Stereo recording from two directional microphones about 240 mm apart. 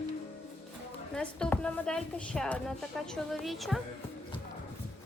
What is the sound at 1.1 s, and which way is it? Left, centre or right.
A woman's voice, centre.